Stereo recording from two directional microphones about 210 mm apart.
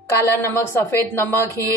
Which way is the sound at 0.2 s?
10° left (ahead or behind).